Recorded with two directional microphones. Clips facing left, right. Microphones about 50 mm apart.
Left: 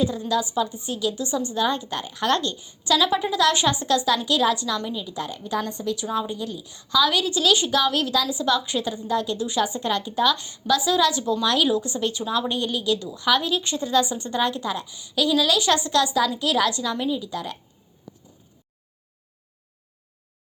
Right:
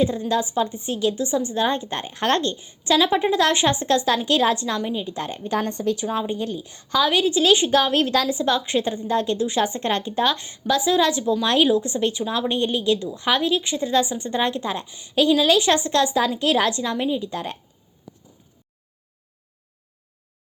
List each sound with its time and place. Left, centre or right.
0.0 s a woman's voice: right